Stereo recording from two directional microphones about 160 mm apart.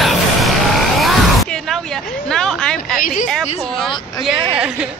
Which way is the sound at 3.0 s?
60° left (ahead or behind).